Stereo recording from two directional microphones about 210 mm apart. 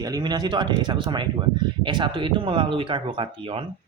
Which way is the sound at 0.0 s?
20° right (ahead or behind).